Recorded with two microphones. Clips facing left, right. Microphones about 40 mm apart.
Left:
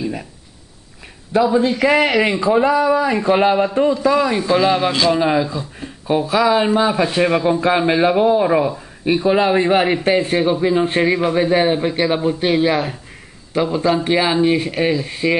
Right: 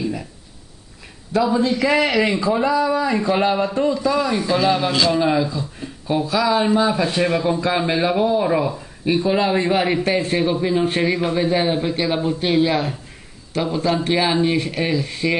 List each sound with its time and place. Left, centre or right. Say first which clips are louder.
1.3 s a man's voice: left 3 dB; left